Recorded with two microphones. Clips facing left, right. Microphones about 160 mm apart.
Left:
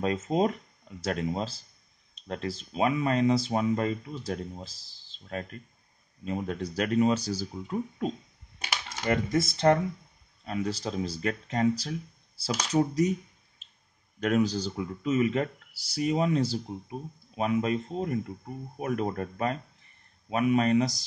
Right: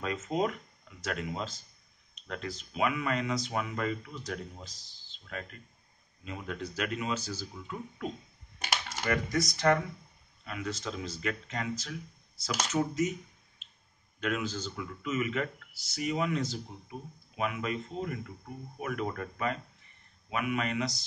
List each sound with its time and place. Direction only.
0.0 s speech: 35° left (ahead or behind)
9.0 s speech: 25° left (ahead or behind)
14.2 s speech: 40° left (ahead or behind)